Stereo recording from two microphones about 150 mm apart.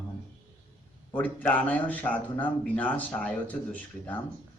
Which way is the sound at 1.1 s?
10° left (ahead or behind).